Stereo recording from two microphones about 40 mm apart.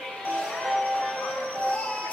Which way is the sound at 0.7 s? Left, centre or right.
Centre.